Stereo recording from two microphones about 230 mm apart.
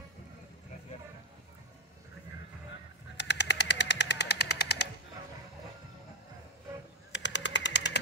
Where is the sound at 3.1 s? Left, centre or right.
Left.